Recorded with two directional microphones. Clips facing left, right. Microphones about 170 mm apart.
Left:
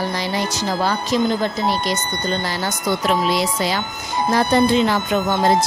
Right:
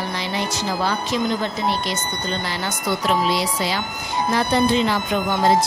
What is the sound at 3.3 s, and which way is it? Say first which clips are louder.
Speech: left 2 dB; 50° left (ahead or behind).